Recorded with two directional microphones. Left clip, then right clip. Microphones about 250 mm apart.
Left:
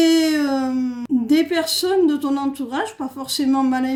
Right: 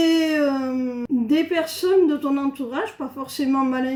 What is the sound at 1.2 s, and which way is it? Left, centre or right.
Speech, left.